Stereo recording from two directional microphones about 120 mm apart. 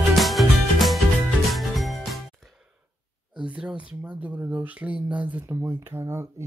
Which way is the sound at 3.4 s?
10° right (ahead or behind).